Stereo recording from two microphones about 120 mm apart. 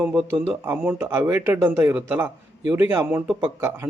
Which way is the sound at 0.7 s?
20° right (ahead or behind).